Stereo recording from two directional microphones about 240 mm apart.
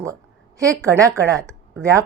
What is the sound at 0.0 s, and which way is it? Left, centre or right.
A woman's voice, centre.